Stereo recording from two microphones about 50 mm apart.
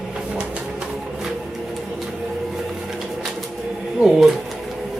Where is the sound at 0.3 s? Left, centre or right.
Centre.